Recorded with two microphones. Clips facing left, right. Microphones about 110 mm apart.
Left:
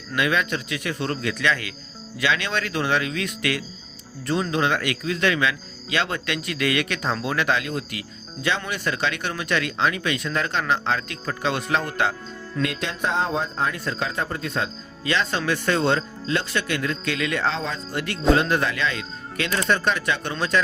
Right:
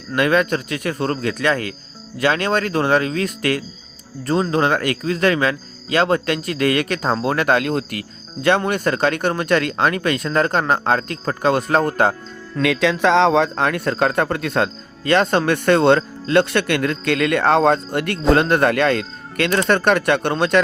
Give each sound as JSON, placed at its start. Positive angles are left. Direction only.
{"t": 0.2, "sound": "speech", "side_deg": -45}
{"t": 12.6, "sound": "a man's voice", "side_deg": -90}